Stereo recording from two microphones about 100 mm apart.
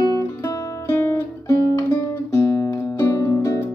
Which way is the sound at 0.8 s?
25° left (ahead or behind).